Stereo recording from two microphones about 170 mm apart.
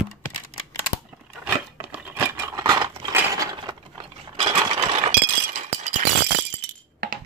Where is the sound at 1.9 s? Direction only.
10° right (ahead or behind).